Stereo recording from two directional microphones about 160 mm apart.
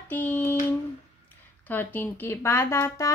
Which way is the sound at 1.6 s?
10° left (ahead or behind).